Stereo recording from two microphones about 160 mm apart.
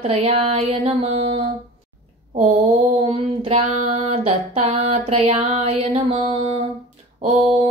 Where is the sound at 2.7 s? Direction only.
40° right (ahead or behind).